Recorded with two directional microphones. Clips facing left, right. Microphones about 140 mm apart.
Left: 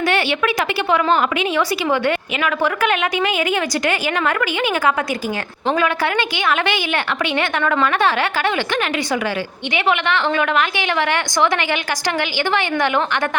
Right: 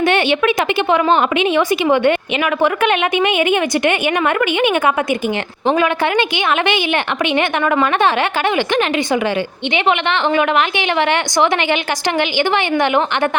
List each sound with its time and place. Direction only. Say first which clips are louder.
0.0 s a woman's voice: right 4 dB; 20° right (ahead or behind)